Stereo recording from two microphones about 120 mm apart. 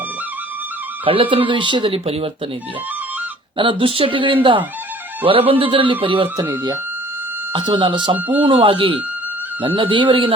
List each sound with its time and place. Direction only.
1.0 s speech: 50° right (ahead or behind)
3.6 s speech: 45° right (ahead or behind)
7.5 s speech: 40° right (ahead or behind)